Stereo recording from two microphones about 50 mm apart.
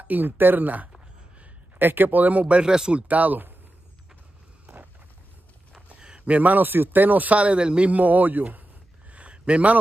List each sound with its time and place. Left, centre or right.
0.0 s speech: right
5.8 s speech: centre; by 8.6 s right
9.1 s a sound: right